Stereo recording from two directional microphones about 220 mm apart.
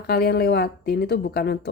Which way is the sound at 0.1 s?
45° left (ahead or behind).